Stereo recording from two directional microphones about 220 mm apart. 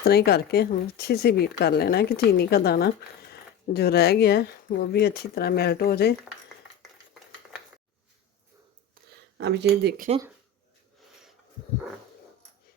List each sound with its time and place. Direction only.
0.0 s speech: 45° left (ahead or behind)
9.0 s a sound: 40° right (ahead or behind)
9.4 s speech: 50° right (ahead or behind)